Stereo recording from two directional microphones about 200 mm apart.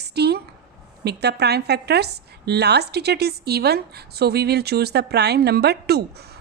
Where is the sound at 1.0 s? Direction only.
55° right (ahead or behind).